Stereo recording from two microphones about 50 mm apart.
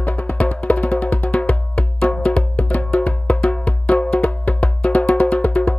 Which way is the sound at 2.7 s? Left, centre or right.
Left.